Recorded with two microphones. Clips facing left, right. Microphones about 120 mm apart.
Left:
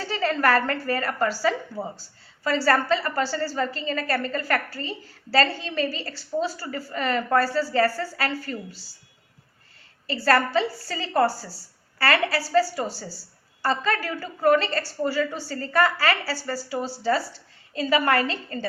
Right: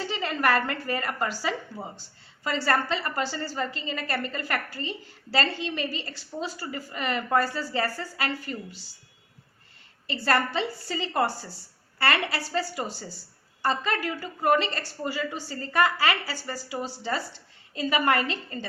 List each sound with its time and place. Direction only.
0.0 s a woman's voice: 15° right (ahead or behind)
10.1 s a woman's voice: 20° right (ahead or behind)